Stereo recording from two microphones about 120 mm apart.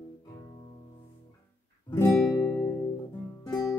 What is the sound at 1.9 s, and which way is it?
Guitar, 25° left (ahead or behind).